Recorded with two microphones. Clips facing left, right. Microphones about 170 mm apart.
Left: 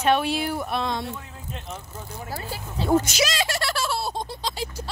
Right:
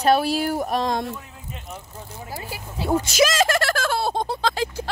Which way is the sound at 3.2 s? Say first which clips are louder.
Right 6 dB; 50° right (ahead or behind).